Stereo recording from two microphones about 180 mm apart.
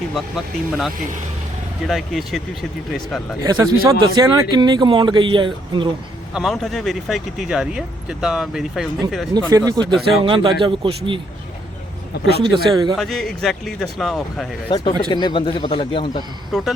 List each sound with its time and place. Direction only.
0.1 s speech: centre (ahead or behind)
1.9 s speech: centre (ahead or behind)
3.4 s speech: 20° right (ahead or behind)
6.3 s speech: centre (ahead or behind)
9.5 s speech: 20° right (ahead or behind)
12.1 s speech: 65° left (ahead or behind)
12.4 s speech: 25° right (ahead or behind)
13.0 s speech: centre (ahead or behind)
15.1 s a man's voice: 25° left (ahead or behind)
16.5 s speech: centre (ahead or behind)